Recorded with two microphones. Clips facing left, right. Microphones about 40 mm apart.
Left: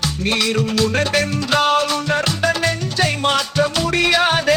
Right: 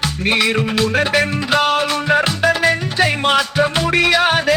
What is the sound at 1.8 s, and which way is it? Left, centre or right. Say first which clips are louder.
Music: right 3 dB; centre.